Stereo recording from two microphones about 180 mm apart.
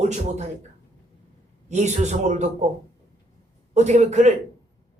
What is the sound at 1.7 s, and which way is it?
Speech, 40° right (ahead or behind).